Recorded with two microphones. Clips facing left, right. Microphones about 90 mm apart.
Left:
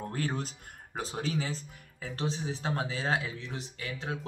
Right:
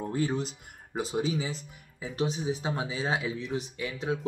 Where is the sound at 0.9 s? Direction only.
10° right (ahead or behind).